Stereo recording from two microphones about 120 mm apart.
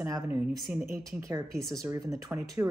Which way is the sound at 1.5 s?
5° left (ahead or behind).